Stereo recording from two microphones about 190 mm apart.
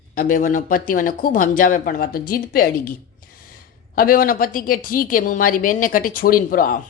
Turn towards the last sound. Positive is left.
turn(degrees=45)  # may be behind; listen again after turning